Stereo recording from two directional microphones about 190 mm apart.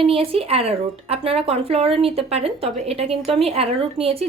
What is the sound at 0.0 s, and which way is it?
Speech, 30° right (ahead or behind).